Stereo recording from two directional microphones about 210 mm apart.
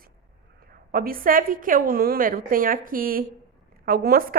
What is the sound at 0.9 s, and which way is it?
A woman's voice, 45° right (ahead or behind).